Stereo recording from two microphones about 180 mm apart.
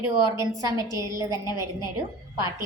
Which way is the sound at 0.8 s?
25° left (ahead or behind).